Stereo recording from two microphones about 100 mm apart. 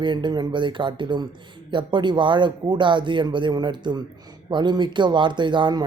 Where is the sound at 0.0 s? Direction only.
50° right (ahead or behind).